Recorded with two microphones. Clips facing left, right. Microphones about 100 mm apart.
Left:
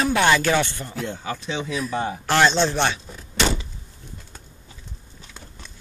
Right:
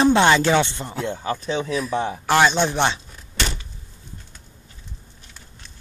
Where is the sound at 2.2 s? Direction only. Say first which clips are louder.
Right 1 dB; 10° right (ahead or behind).